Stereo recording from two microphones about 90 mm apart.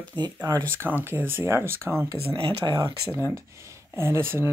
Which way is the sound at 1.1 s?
25° right (ahead or behind).